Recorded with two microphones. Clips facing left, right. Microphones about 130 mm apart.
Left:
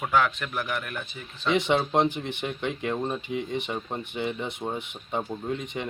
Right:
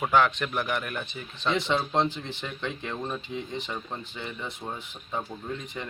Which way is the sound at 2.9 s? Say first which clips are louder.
Left 5 dB; 20° left (ahead or behind).